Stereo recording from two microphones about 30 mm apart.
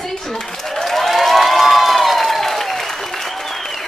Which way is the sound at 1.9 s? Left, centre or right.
Centre.